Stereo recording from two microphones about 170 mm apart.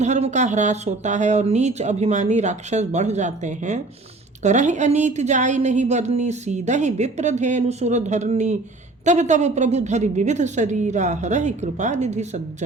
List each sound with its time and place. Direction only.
0.0 s a woman's voice: 45° right (ahead or behind)